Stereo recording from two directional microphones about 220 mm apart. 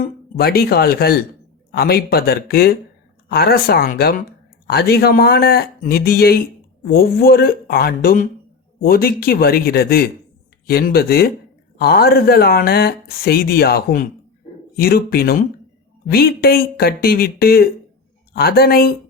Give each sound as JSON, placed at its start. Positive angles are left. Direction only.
{"t": 0.0, "sound": "speech", "side_deg": 45}